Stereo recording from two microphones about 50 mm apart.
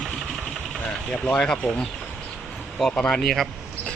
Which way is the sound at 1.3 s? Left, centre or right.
Centre.